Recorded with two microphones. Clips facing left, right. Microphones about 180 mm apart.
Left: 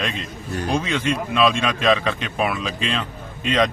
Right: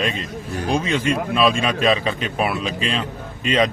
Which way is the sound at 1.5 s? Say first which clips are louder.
Right 1 dB; 10° right (ahead or behind).